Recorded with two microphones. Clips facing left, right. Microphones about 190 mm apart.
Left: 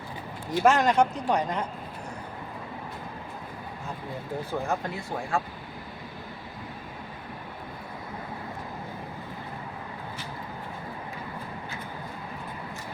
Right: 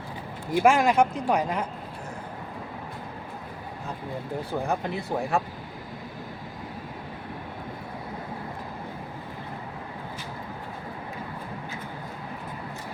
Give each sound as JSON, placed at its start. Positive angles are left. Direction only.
{"t": 0.5, "sound": "speech", "side_deg": -10}
{"t": 4.6, "sound": "speech", "side_deg": -20}